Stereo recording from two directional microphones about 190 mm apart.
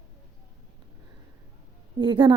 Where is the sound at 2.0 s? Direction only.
25° right (ahead or behind).